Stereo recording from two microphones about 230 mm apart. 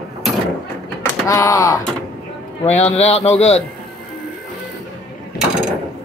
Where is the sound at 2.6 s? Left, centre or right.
Left.